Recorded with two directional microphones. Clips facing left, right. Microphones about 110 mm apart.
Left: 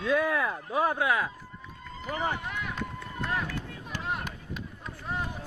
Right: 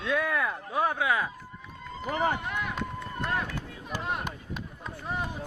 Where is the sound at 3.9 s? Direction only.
15° right (ahead or behind).